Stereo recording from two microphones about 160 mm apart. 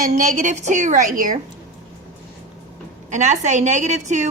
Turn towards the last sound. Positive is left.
turn(degrees=-50)  # may be behind; listen again after turning